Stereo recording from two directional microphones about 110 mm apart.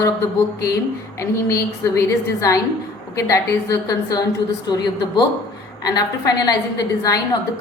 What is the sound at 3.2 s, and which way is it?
A woman's voice, 30° left (ahead or behind).